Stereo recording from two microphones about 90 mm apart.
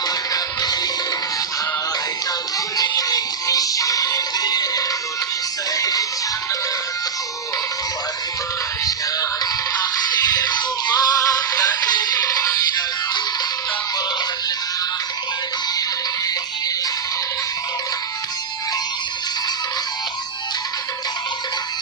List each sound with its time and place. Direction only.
0.1 s music: 45° left (ahead or behind)
2.7 s music: 45° left (ahead or behind)
8.8 s music: 40° left (ahead or behind)
10.9 s music: 40° left (ahead or behind)